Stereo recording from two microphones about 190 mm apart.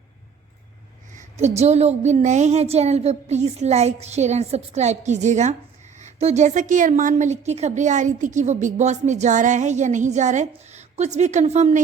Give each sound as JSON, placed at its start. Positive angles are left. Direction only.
{"t": 1.5, "sound": "a woman's voice", "side_deg": -35}